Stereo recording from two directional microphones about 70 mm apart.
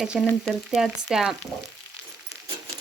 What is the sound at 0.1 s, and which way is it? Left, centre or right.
Speech, centre.